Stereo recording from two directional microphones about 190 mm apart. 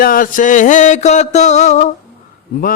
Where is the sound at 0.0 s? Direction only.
45° left (ahead or behind).